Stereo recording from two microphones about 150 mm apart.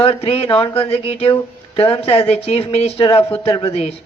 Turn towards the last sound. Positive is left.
turn(degrees=40)  # may be behind; listen again after turning